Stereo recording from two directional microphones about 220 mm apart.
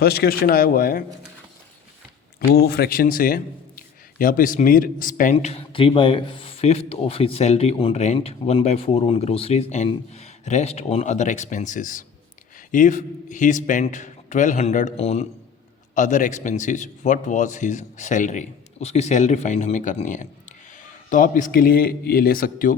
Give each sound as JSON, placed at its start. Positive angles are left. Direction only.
{"t": 0.0, "sound": "speech", "side_deg": 45}
{"t": 2.4, "sound": "a man's voice", "side_deg": 45}